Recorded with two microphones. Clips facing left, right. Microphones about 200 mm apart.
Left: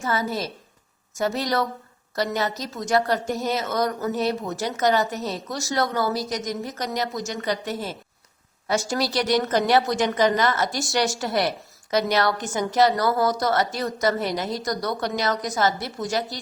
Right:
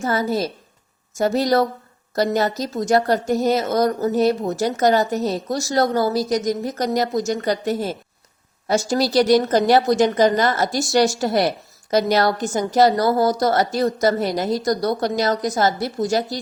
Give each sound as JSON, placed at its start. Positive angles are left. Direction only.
{"t": 0.0, "sound": "a woman's voice", "side_deg": -40}